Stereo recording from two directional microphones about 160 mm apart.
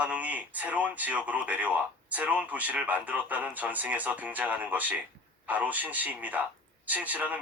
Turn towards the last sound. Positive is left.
turn(degrees=-10)  # may be behind; listen again after turning